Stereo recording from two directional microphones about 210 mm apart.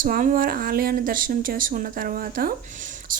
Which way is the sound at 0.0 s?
40° right (ahead or behind).